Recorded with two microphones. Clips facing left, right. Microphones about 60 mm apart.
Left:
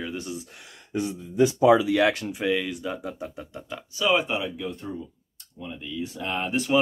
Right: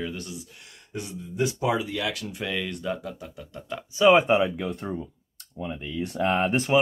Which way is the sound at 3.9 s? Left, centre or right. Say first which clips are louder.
Right 6 dB; right.